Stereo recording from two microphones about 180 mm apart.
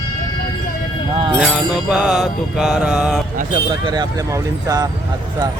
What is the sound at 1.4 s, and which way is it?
Mantra, centre (ahead or behind).